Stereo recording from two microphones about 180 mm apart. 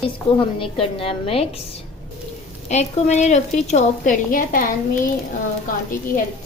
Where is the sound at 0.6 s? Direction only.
30° left (ahead or behind).